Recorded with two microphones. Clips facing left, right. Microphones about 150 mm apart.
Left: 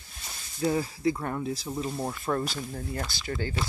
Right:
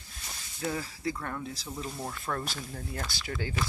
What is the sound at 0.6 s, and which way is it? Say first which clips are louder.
Speech: left 7 dB; 25° left (ahead or behind).